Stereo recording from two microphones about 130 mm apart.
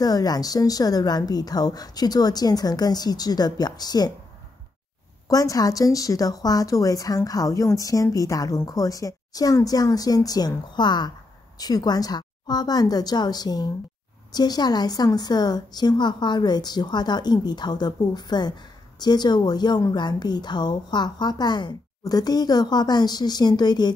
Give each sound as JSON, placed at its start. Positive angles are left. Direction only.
{"t": 0.0, "sound": "a woman's voice", "side_deg": 30}
{"t": 5.3, "sound": "a woman's voice", "side_deg": 25}